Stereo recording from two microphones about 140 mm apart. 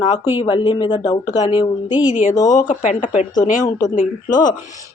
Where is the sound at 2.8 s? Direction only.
65° left (ahead or behind).